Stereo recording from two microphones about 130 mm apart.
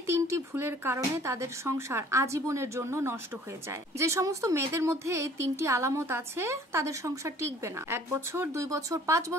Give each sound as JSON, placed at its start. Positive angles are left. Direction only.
{"t": 0.0, "sound": "a woman's voice", "side_deg": -20}